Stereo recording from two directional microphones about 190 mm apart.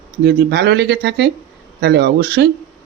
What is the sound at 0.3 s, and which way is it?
Speech, 60° right (ahead or behind).